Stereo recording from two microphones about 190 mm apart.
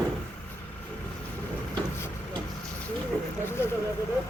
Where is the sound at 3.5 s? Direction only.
10° left (ahead or behind).